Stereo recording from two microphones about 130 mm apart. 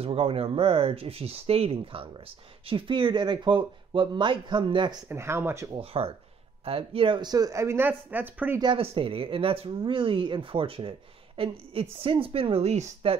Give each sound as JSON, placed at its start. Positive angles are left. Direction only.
{"t": 0.0, "sound": "speech", "side_deg": -45}
{"t": 5.0, "sound": "speech", "side_deg": -20}
{"t": 5.8, "sound": "speech", "side_deg": -45}
{"t": 8.5, "sound": "speech", "side_deg": -40}